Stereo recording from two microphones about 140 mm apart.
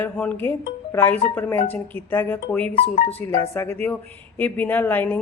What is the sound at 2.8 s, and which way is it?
Speech, 50° left (ahead or behind).